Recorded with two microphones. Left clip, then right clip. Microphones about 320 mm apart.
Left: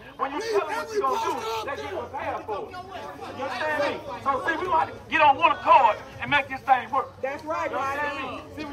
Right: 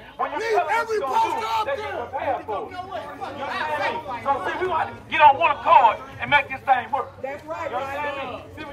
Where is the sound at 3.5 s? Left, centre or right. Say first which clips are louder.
Right 1 dB; left.